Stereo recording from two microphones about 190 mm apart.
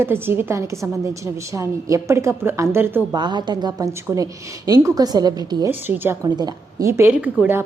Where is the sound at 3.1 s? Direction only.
25° right (ahead or behind).